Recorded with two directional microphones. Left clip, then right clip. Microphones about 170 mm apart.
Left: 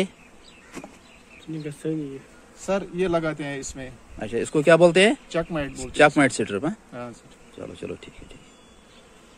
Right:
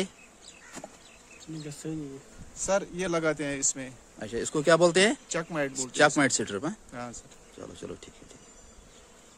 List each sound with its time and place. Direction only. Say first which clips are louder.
1.8 s speech: left 9 dB; 15° right (ahead or behind)
2.6 s a man's voice: left 3 dB; 45° right (ahead or behind)
4.2 s speech: left 7 dB; centre (ahead or behind)
5.3 s speech: left 4 dB; 40° right (ahead or behind)
5.8 s speech: left 6 dB; centre (ahead or behind)
6.9 s speech: left 3 dB; 40° right (ahead or behind)
7.5 s speech: left 6 dB; 5° right (ahead or behind)